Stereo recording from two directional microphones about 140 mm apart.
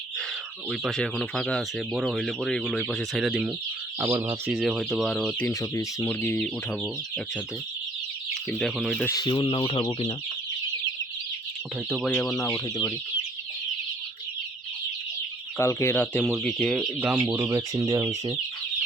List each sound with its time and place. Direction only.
0.7 s speech: centre (ahead or behind)
4.0 s speech: 20° right (ahead or behind)
4.5 s speech: centre (ahead or behind)
5.5 s speech: 20° left (ahead or behind)
8.4 s speech: centre (ahead or behind)
9.0 s speech: 30° left (ahead or behind)
12.0 s speech: 10° left (ahead or behind)
12.4 s speech: 25° left (ahead or behind)
15.5 s speech: 20° left (ahead or behind); by 16.9 s centre (ahead or behind)
17.0 s speech: 15° right (ahead or behind)